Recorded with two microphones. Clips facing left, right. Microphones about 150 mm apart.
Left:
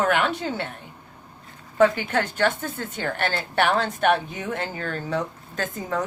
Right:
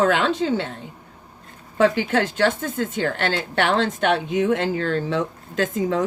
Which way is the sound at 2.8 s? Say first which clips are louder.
Right 4 dB; 80° right.